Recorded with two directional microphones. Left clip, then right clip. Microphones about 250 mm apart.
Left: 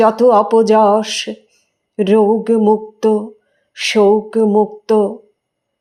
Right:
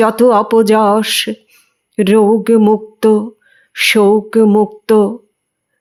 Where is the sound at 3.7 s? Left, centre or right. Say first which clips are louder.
Right 2 dB; right.